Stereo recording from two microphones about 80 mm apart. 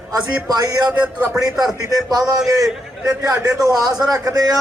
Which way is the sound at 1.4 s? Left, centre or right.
Right.